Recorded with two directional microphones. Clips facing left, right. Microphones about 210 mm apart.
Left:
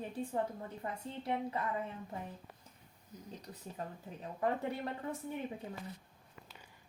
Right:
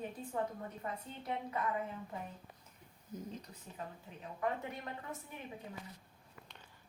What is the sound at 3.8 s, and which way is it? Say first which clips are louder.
Speech: left 2 dB; 40° left (ahead or behind).